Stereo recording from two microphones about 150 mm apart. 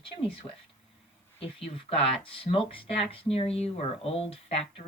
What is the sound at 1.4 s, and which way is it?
Speech, 40° left (ahead or behind).